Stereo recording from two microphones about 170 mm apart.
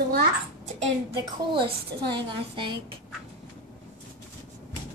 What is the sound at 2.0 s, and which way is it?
Speech, 25° right (ahead or behind).